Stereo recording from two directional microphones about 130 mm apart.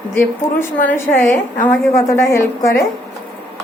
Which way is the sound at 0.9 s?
15° left (ahead or behind).